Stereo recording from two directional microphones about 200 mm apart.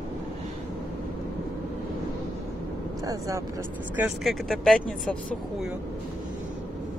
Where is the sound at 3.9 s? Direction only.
5° right (ahead or behind).